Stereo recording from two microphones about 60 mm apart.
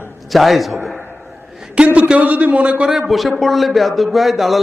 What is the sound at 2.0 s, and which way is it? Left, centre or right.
Speech, right.